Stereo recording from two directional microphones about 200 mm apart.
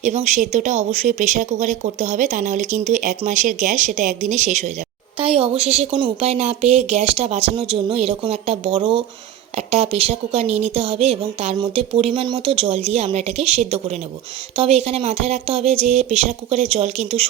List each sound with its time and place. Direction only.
0.0 s a woman's voice: 35° right (ahead or behind)